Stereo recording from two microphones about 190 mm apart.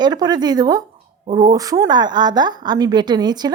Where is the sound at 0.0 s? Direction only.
20° right (ahead or behind).